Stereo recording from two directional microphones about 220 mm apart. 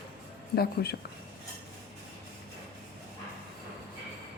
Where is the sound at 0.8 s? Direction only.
45° left (ahead or behind).